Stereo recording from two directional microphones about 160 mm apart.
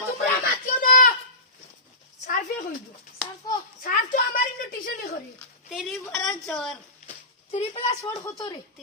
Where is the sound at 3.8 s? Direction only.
60° left (ahead or behind).